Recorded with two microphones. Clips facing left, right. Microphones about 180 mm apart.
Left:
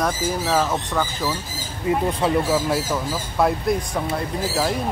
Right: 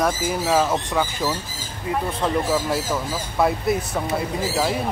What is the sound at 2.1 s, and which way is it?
Speech, 5° left (ahead or behind).